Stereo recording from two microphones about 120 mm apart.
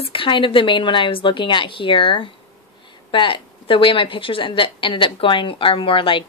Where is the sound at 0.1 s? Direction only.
45° left (ahead or behind).